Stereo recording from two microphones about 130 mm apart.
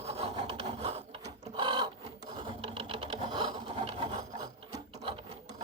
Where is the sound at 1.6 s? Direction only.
35° right (ahead or behind).